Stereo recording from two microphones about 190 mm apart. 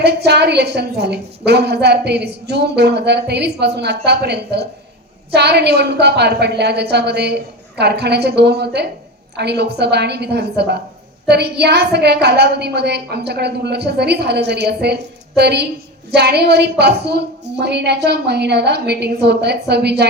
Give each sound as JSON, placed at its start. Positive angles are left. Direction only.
{"t": 0.0, "sound": "a woman's voice", "side_deg": -60}